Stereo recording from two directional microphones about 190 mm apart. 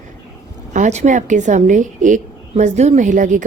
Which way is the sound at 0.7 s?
40° right (ahead or behind).